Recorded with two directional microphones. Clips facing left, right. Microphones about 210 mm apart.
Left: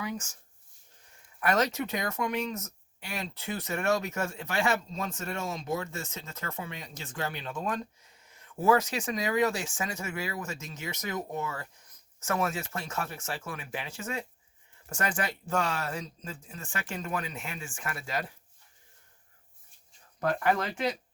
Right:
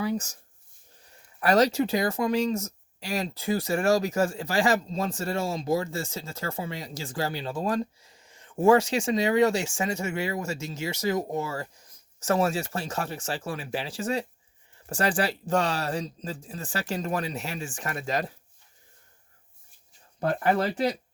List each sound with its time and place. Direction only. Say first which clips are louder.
0.0 s speech: right 7 dB; 35° right (ahead or behind)
1.4 s speech: right 6 dB; 35° right (ahead or behind)
20.1 s speech: right 3 dB; 30° right (ahead or behind)